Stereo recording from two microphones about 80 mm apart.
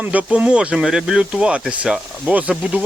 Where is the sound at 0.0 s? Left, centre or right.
Centre.